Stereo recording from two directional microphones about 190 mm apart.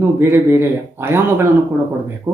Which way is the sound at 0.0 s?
15° right (ahead or behind).